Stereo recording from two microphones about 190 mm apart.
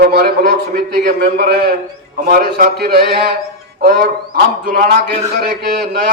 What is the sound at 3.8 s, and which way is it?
Music, 50° right (ahead or behind).